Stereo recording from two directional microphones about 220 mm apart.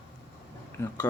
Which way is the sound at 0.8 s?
10° left (ahead or behind).